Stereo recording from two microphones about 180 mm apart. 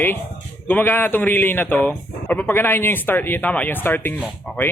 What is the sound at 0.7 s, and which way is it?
Speech, 10° left (ahead or behind).